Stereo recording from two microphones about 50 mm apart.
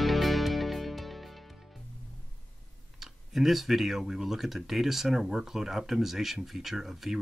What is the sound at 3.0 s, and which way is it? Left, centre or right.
Speech, centre.